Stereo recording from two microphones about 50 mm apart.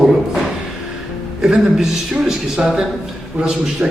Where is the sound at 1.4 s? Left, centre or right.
Centre.